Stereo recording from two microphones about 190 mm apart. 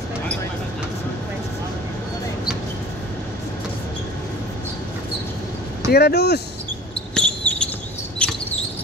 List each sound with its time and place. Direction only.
5.9 s speech: 60° left (ahead or behind)
7.2 s a sound: 5° left (ahead or behind)
8.2 s cricket: 5° left (ahead or behind)